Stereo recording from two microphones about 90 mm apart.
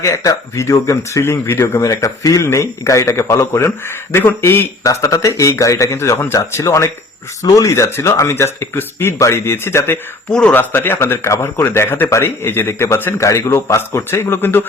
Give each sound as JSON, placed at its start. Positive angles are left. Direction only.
{"t": 0.0, "sound": "speech", "side_deg": 40}
{"t": 4.8, "sound": "speech", "side_deg": 35}
{"t": 6.1, "sound": "speech", "side_deg": 25}
{"t": 6.6, "sound": "speech", "side_deg": 35}
{"t": 7.7, "sound": "speech", "side_deg": 30}